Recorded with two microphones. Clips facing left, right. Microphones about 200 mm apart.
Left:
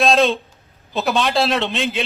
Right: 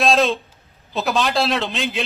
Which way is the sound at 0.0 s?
Centre (ahead or behind).